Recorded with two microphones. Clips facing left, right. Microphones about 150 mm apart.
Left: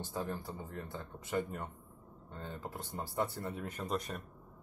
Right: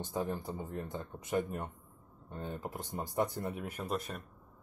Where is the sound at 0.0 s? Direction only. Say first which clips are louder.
Right 3 dB; 15° right (ahead or behind); by 4.2 s centre (ahead or behind).